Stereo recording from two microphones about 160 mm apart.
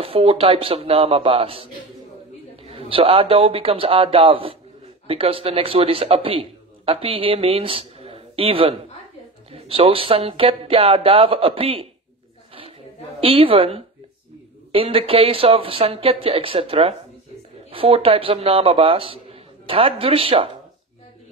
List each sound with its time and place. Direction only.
0.0 s speech: 35° right (ahead or behind)
13.2 s a man's voice: 35° right (ahead or behind)